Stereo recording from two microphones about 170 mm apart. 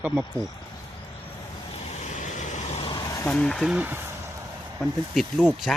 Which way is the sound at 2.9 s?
20° left (ahead or behind).